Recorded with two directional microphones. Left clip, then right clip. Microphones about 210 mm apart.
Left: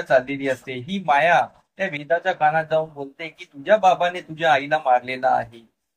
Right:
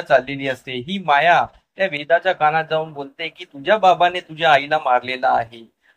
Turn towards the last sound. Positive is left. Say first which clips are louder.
# right 2 dB
turn(degrees=-20)  # may be behind; listen again after turning